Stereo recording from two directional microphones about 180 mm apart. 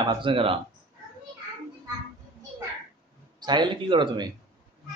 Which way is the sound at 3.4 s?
25° right (ahead or behind).